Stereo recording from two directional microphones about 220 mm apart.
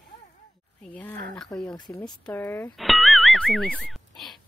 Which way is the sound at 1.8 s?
15° left (ahead or behind).